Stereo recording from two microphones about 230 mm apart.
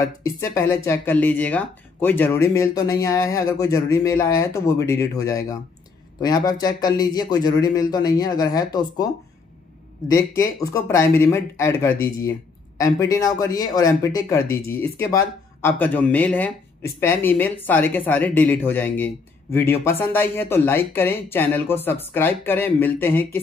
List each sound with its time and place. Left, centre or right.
0.4 s speech: centre
10.0 s speech: centre